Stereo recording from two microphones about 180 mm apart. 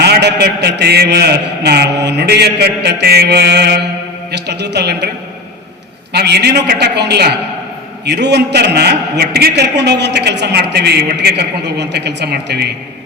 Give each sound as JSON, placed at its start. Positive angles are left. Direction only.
{"t": 0.0, "sound": "a man's voice", "side_deg": -65}
{"t": 6.1, "sound": "a man's voice", "side_deg": -65}